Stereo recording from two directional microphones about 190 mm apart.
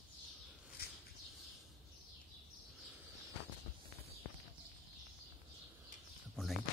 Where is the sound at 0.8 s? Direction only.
55° left (ahead or behind).